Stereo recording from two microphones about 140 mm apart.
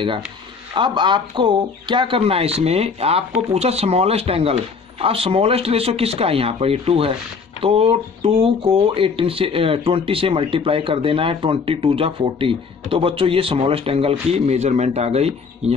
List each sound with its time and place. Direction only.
0.7 s speech: 35° right (ahead or behind)